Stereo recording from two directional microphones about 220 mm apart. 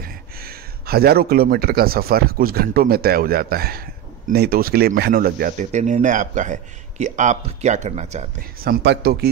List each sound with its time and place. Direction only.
0.0 s speech: 45° right (ahead or behind)
8.6 s speech: 45° right (ahead or behind)